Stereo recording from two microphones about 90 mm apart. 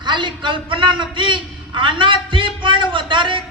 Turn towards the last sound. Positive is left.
turn(degrees=-65)  # may be behind; listen again after turning